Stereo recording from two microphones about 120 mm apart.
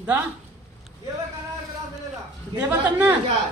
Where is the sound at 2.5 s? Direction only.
15° right (ahead or behind).